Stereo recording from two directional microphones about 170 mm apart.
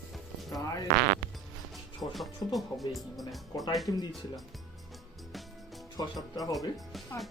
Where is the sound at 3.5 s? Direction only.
20° left (ahead or behind).